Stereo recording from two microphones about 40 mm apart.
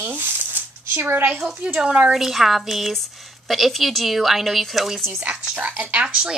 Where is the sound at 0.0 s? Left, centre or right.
Right.